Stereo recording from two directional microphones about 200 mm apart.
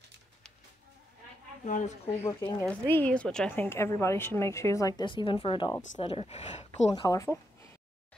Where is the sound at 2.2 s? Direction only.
15° left (ahead or behind); by 7.0 s 35° left (ahead or behind).